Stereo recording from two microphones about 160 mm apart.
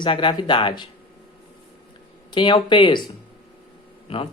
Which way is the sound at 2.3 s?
30° left (ahead or behind).